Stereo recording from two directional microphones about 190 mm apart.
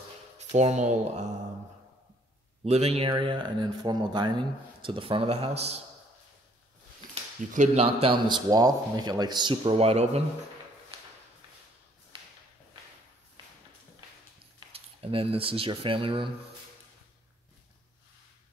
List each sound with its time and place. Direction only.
0.4 s speech: 35° right (ahead or behind)
2.6 s speech: 35° right (ahead or behind)
7.5 s speech: 35° right (ahead or behind)
12.1 s a sound: 30° right (ahead or behind)
14.4 s speech: 30° right (ahead or behind)